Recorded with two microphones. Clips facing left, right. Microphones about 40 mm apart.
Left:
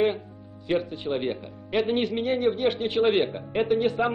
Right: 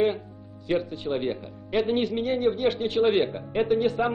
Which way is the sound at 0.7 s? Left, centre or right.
Centre.